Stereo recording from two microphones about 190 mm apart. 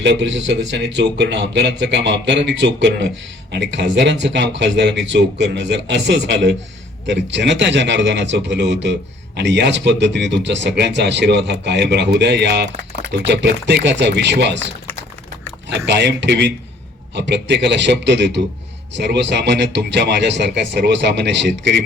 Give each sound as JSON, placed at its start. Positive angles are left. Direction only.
{"t": 0.0, "sound": "a man's voice", "side_deg": -65}
{"t": 15.7, "sound": "a man's voice", "side_deg": -65}